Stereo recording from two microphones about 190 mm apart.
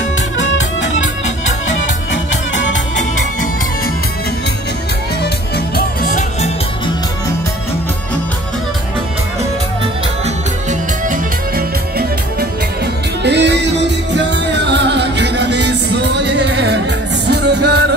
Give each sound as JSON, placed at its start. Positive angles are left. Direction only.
{"t": 0.4, "sound": "music", "side_deg": 75}
{"t": 5.8, "sound": "music", "side_deg": 45}
{"t": 10.2, "sound": "music", "side_deg": -40}
{"t": 13.2, "sound": "music", "side_deg": -65}